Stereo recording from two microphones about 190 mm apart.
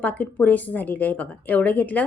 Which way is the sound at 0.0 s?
10° left (ahead or behind).